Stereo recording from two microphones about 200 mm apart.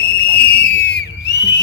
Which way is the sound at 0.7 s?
60° left (ahead or behind).